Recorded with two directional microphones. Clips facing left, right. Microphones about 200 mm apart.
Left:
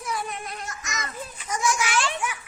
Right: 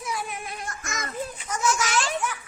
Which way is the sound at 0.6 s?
55° right (ahead or behind).